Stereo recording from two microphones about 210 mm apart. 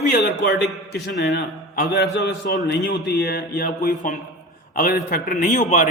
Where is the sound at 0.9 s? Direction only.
55° left (ahead or behind).